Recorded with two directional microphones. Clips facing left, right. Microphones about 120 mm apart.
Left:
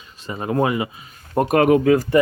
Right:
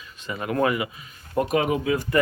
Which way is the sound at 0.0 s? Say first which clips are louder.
Left 3 dB; 30° left (ahead or behind).